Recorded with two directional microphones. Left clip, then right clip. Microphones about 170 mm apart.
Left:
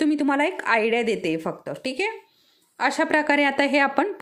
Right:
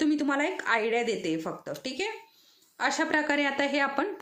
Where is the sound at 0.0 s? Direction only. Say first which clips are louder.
Left 5 dB; 40° left (ahead or behind).